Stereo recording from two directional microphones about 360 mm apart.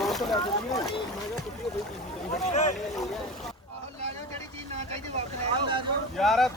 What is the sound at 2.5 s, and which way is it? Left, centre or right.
Speech, centre.